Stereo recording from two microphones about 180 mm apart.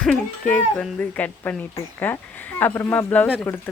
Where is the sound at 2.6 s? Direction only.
15° left (ahead or behind).